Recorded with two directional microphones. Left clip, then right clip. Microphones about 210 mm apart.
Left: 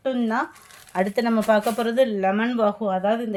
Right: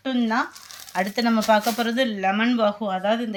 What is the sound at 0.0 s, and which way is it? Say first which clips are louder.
Speech: even; 55° left (ahead or behind).